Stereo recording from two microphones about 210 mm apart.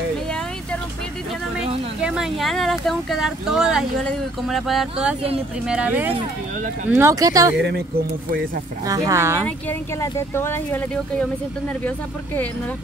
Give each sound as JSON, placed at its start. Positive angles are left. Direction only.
{"t": 2.0, "sound": "speech", "side_deg": -5}
{"t": 8.8, "sound": "speech", "side_deg": -15}
{"t": 9.7, "sound": "speech", "side_deg": 15}